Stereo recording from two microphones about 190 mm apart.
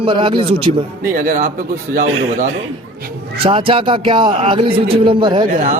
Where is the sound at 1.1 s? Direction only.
50° right (ahead or behind).